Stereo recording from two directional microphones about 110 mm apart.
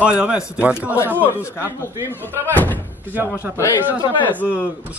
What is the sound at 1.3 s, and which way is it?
Speech, 25° left (ahead or behind).